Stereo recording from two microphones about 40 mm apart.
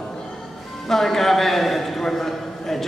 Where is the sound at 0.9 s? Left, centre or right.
Centre.